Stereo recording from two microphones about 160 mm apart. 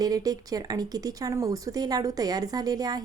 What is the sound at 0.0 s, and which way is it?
A woman's voice, 25° right (ahead or behind).